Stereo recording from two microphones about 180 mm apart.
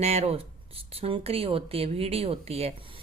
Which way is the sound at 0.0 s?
35° right (ahead or behind).